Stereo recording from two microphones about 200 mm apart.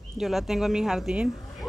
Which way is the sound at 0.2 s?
Centre (ahead or behind).